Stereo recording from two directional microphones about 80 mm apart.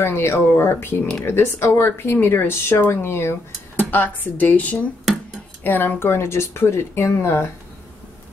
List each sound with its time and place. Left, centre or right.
0.0 s speech: left